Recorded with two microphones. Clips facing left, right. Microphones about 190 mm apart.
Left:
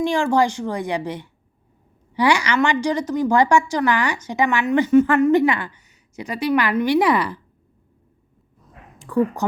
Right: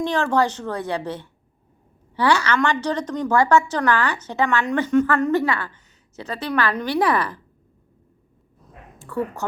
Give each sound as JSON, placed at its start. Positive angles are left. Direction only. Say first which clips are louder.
{"t": 0.0, "sound": "a woman's voice", "louder": "left 2 dB", "side_deg": 10}
{"t": 9.0, "sound": "speech", "louder": "left 6 dB", "side_deg": 15}